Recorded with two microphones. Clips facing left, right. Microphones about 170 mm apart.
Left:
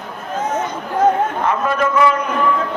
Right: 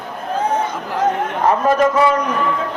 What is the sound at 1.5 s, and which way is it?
Speech, 40° right (ahead or behind).